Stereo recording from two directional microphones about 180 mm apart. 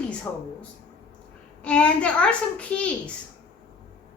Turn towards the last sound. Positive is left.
turn(degrees=5)  # may be behind; listen again after turning